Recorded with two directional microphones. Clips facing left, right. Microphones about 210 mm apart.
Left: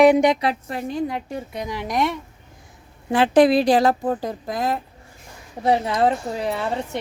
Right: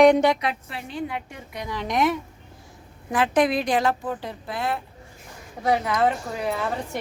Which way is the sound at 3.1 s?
30° left (ahead or behind).